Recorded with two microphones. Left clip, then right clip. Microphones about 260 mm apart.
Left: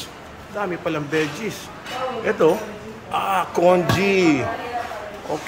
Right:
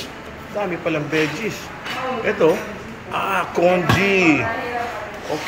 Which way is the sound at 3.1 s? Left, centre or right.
Centre.